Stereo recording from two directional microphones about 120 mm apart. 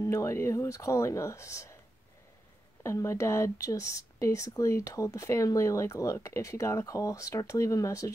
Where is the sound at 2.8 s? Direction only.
25° left (ahead or behind).